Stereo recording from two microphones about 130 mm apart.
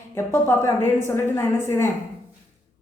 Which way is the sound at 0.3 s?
20° left (ahead or behind).